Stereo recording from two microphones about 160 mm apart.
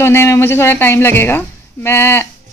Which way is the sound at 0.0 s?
15° left (ahead or behind).